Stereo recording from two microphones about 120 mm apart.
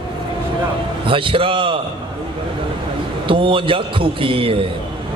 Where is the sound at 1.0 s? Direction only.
45° right (ahead or behind).